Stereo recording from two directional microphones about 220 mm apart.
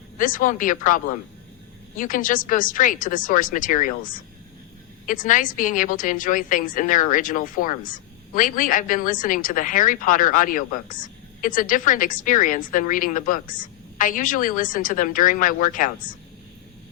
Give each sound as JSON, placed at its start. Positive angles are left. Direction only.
{"t": 0.2, "sound": "a woman's voice", "side_deg": 40}